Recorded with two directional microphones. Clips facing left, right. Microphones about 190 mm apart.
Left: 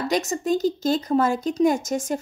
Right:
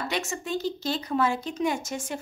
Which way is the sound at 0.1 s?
40° left (ahead or behind).